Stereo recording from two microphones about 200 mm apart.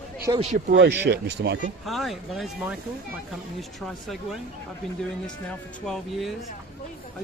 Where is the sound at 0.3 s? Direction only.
25° right (ahead or behind).